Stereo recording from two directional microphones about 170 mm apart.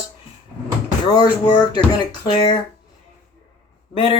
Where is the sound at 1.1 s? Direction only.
25° left (ahead or behind).